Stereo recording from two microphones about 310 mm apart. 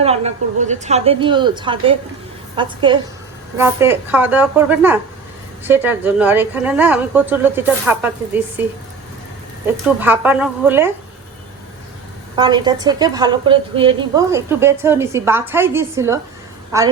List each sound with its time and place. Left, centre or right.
0.0 s a woman's voice: centre
9.8 s a woman's voice: centre
12.4 s a woman's voice: centre